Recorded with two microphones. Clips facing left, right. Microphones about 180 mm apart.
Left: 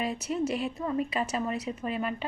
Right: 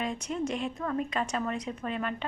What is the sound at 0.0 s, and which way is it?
A woman's voice, 5° left (ahead or behind).